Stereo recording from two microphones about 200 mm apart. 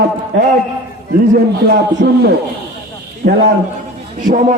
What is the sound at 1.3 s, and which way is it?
A man's voice, 55° right (ahead or behind).